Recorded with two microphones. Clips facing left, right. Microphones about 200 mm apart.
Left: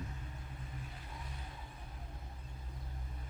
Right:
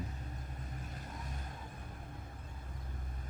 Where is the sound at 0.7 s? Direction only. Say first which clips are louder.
Right 3 dB; 45° right (ahead or behind).